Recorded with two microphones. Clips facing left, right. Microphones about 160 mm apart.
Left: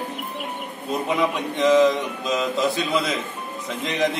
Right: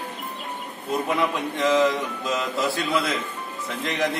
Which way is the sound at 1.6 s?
20° left (ahead or behind).